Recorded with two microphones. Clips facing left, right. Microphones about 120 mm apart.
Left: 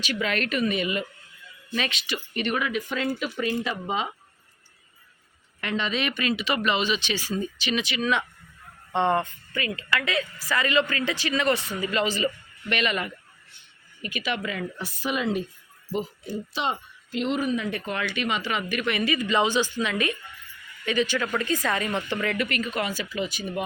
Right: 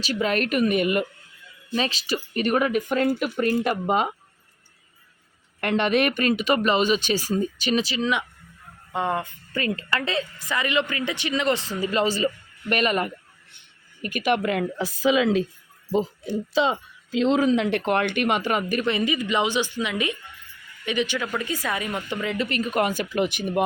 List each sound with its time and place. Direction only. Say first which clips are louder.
0.0 s speech: right 4 dB; 40° right (ahead or behind)
1.7 s speech: right 4 dB; 35° right (ahead or behind); by 4.1 s 55° right (ahead or behind)
5.5 s speech: right 7 dB; 55° right (ahead or behind); by 8.0 s 35° right (ahead or behind)
8.9 s speech: left 3 dB; 5° right (ahead or behind)
9.5 s a woman's voice: right 7 dB; 40° right (ahead or behind); by 11.7 s 25° right (ahead or behind)
11.8 s speech: right 3 dB; 35° right (ahead or behind); by 14.7 s 60° right (ahead or behind)
15.1 s a woman's voice: right 5 dB; 90° right
17.3 s speech: right 7 dB; 90° right; by 18.8 s 50° right (ahead or behind)
18.8 s speech: right 2 dB; 25° right (ahead or behind)
22.4 s speech: right 2 dB; 35° right (ahead or behind)
22.7 s speech: right 6 dB; 50° right (ahead or behind)